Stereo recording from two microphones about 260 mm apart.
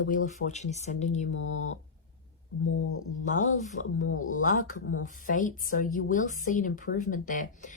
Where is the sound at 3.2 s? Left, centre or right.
Left.